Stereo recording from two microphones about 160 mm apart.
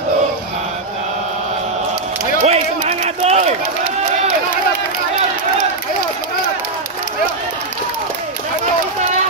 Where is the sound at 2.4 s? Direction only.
40° right (ahead or behind).